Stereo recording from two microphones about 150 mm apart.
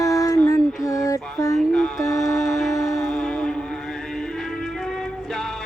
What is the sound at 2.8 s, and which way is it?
Music, centre (ahead or behind).